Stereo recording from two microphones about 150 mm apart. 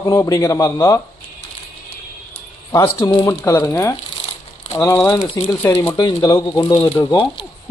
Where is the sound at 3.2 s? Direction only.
20° left (ahead or behind).